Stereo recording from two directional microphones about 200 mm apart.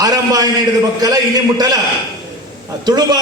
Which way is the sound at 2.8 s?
20° right (ahead or behind).